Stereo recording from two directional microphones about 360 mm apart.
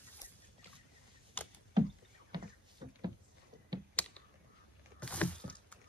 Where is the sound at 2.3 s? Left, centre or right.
Centre.